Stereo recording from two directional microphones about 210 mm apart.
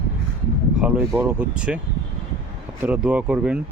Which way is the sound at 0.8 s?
10° right (ahead or behind).